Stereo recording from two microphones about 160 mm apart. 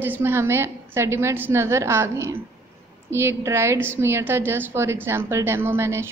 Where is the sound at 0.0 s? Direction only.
15° right (ahead or behind).